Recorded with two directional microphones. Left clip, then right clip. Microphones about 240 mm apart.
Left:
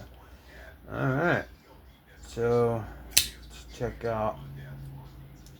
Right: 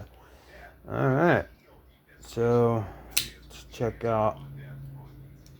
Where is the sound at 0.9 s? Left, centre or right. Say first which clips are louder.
Right 4 dB; right.